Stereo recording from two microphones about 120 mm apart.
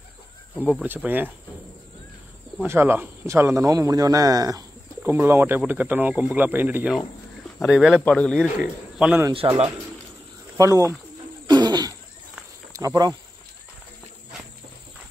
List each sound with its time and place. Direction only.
0.8 s speech: 15° right (ahead or behind)
2.6 s a man's voice: 20° right (ahead or behind)
5.0 s speech: 20° right (ahead or behind)
7.6 s speech: 5° right (ahead or behind)
8.0 s speech: 10° left (ahead or behind)
8.5 s speech: 10° right (ahead or behind)
9.4 s speech: 45° right (ahead or behind)
10.6 s a man's voice: 25° right (ahead or behind)
11.4 s throat clearing: 35° right (ahead or behind)
12.7 s speech: 30° right (ahead or behind)